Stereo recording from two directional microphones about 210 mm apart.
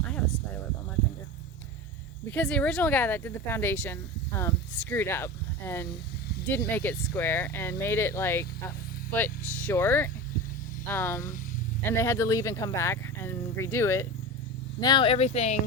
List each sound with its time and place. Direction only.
2.3 s speech: 5° left (ahead or behind); by 15.5 s 30° left (ahead or behind)